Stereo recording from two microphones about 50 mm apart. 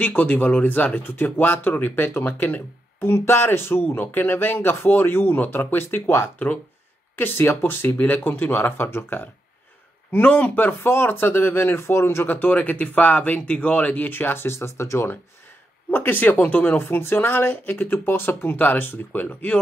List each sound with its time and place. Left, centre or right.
0.0 s speech: left
1.0 s speech: left
10.1 s speech: left
12.3 s speech: left
14.1 s speech: left
15.9 s speech: left